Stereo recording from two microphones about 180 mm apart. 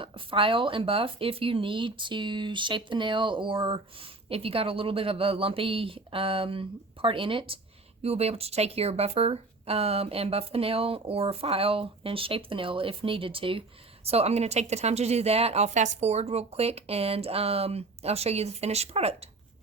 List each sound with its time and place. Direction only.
0.0 s speech: 30° right (ahead or behind)